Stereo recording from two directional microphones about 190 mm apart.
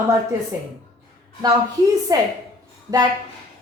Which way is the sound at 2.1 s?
20° right (ahead or behind).